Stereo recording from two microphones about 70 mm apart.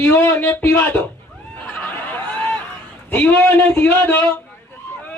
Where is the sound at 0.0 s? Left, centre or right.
Left.